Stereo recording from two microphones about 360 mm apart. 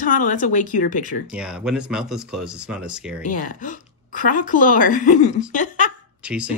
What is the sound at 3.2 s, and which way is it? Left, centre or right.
Speech, left.